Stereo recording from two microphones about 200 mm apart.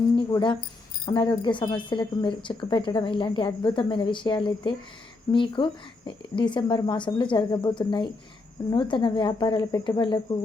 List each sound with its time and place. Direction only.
0.2 s speech: 20° left (ahead or behind)